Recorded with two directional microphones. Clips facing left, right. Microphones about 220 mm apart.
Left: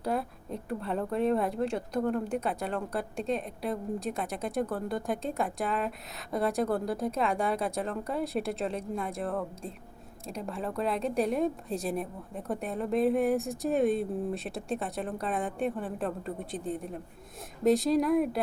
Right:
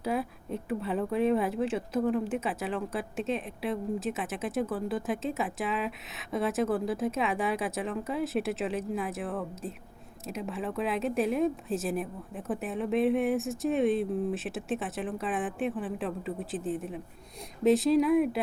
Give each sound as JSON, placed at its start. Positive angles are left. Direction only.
{"t": 0.0, "sound": "speech", "side_deg": 0}